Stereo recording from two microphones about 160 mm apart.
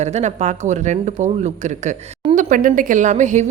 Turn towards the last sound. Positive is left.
turn(degrees=-50)  # may be behind; listen again after turning